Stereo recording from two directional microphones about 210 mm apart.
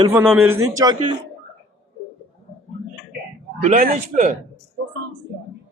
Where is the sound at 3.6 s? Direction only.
35° right (ahead or behind).